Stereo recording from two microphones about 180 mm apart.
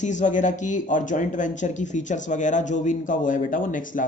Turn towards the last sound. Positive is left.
turn(degrees=45)  # may be behind; listen again after turning